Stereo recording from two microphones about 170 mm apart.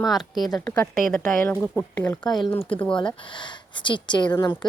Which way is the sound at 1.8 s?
10° left (ahead or behind).